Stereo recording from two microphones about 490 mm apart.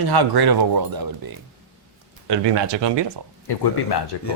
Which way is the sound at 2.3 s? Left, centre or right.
Right.